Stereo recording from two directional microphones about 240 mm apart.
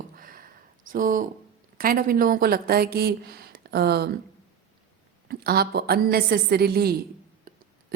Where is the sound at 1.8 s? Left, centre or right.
Right.